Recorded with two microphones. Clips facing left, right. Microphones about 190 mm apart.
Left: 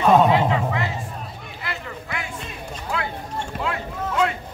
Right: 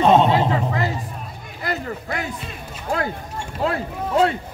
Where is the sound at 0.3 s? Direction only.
40° right (ahead or behind).